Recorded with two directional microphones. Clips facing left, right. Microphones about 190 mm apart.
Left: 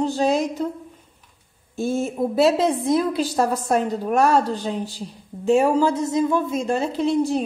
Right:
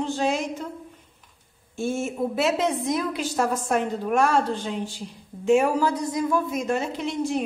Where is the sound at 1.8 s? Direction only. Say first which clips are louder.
Left 3 dB; 35° left (ahead or behind).